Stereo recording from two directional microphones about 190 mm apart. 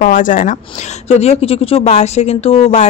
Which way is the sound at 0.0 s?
45° left (ahead or behind).